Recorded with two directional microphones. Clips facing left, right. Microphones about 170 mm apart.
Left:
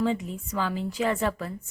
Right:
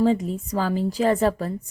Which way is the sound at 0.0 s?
35° right (ahead or behind).